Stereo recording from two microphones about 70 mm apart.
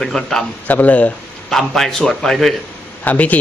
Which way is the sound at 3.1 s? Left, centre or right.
Left.